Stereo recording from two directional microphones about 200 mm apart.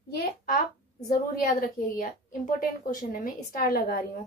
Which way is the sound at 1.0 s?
45° left (ahead or behind).